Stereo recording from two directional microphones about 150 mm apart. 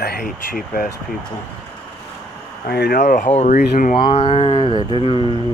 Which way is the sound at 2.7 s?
90° left.